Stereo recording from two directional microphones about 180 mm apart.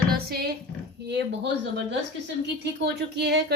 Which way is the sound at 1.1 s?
70° right (ahead or behind).